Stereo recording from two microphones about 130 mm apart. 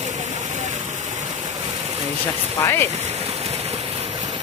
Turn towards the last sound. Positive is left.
turn(degrees=20)  # may be behind; listen again after turning